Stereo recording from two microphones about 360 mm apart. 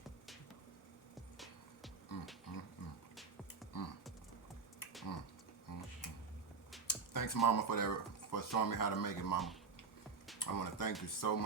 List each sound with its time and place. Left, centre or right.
2.1 s beatboxing: left
3.7 s typing: left
5.7 s tick-tock: left
6.8 s a sound: left
7.4 s speech: left
10.4 s speech: left